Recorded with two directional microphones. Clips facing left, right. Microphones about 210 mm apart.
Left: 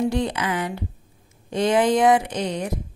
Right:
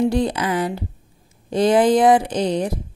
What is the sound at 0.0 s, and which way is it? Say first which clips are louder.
A woman's voice: right 4 dB; 35° right (ahead or behind).